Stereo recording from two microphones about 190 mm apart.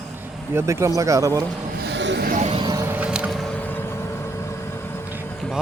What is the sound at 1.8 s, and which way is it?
Vehicle, 65° right (ahead or behind).